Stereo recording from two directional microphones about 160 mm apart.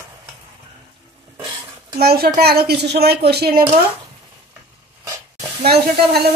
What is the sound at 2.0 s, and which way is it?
A child's voice, 75° right (ahead or behind).